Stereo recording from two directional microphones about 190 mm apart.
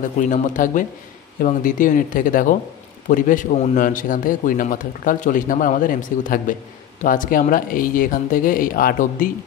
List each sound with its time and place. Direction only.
0.3 s a man's voice: 40° left (ahead or behind)